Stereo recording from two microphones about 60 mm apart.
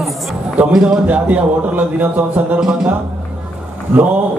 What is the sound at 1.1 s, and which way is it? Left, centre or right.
A man's voice, right.